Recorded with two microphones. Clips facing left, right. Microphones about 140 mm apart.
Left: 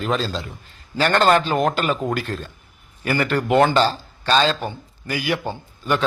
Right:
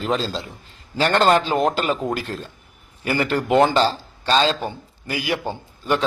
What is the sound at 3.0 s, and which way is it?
A man's voice, 30° right (ahead or behind).